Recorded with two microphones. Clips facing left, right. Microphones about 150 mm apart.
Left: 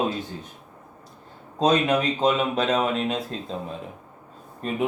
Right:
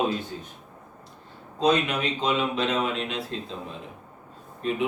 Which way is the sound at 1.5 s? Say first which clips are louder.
Left 3 dB; 45° left (ahead or behind).